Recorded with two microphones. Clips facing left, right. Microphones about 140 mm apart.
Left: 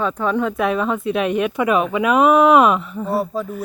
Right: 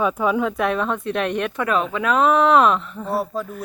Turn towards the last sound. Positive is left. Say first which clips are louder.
# left 3 dB
turn(degrees=0)  # may be behind; listen again after turning